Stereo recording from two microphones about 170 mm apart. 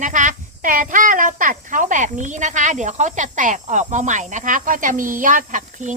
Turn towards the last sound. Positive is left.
turn(degrees=-45)  # may be behind; listen again after turning